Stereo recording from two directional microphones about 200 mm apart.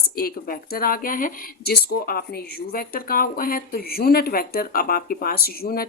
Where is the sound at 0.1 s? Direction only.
50° left (ahead or behind).